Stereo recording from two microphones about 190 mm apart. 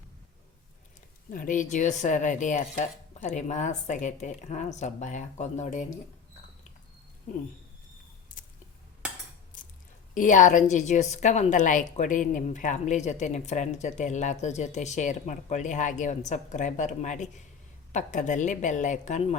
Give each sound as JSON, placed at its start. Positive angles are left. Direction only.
{"t": 1.3, "sound": "a woman's voice", "side_deg": 45}
{"t": 10.2, "sound": "a woman's voice", "side_deg": 40}